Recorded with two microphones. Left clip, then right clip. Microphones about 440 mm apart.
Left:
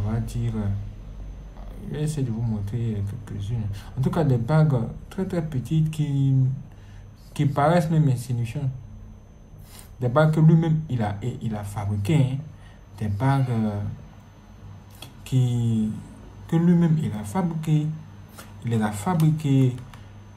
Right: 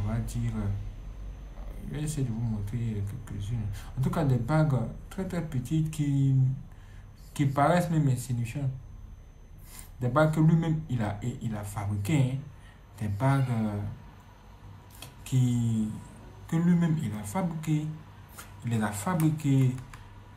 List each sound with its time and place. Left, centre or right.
0.1 s speech: centre
1.9 s speech: centre
7.3 s speech: centre
9.9 s speech: centre
15.0 s a sound: centre
16.4 s speech: centre